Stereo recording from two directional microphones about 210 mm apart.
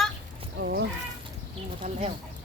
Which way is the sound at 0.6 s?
55° right (ahead or behind).